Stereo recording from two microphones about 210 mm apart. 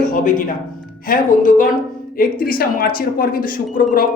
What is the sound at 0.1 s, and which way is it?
Speech, 40° left (ahead or behind).